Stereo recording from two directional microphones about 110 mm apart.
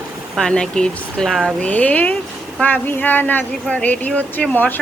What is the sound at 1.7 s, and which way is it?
Speech, 15° left (ahead or behind).